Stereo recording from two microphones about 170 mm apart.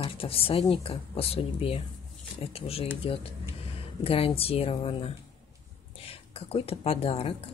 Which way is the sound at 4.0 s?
35° left (ahead or behind).